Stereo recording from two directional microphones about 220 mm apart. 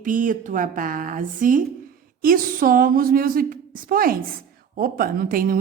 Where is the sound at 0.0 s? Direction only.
35° right (ahead or behind).